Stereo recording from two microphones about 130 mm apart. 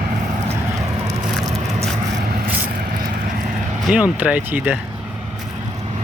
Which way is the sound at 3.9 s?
10° right (ahead or behind).